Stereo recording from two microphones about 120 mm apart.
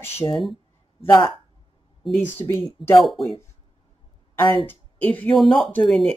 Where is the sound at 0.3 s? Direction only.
Centre (ahead or behind).